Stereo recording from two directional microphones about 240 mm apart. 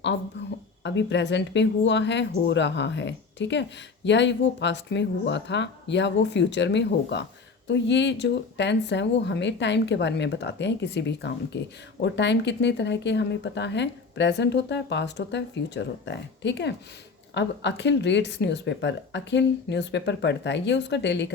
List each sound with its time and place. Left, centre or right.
0.8 s speech: left